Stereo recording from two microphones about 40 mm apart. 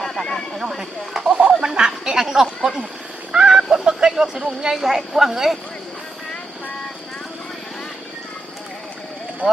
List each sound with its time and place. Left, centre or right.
0.0 s a sound: centre
0.8 s a woman's voice: centre
1.3 s duck: right
1.6 s a sound: centre
3.4 s fowl: centre
4.7 s a woman's voice: centre
9.4 s speech: left